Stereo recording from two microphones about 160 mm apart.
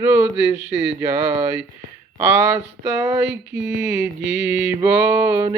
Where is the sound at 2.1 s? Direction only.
15° right (ahead or behind).